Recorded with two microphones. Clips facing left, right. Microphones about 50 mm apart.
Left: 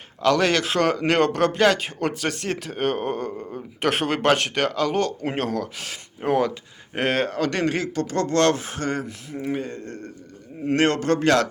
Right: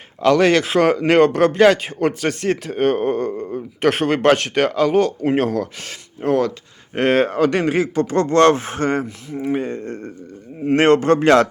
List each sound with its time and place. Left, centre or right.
0.2 s speech: centre
6.2 s speech: centre
6.9 s speech: centre
7.3 s speech: centre